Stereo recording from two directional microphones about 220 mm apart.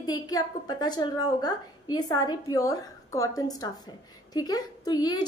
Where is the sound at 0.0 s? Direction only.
15° left (ahead or behind).